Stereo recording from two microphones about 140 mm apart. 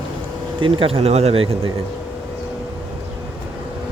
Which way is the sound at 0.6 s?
40° right (ahead or behind).